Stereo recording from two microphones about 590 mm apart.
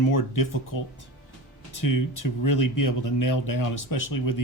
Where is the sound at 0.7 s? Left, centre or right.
Left.